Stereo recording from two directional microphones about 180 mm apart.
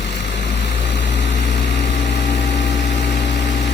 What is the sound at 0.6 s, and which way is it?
Vehicle, 75° left (ahead or behind).